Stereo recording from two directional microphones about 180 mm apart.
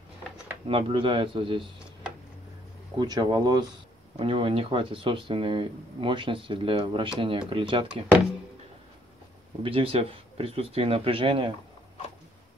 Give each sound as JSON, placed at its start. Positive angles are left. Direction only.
{"t": 0.7, "sound": "speech", "side_deg": -30}
{"t": 3.0, "sound": "speech", "side_deg": -25}
{"t": 9.6, "sound": "speech", "side_deg": -30}